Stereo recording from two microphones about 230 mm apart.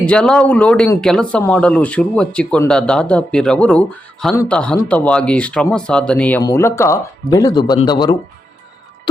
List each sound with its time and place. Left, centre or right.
0.0 s speech: centre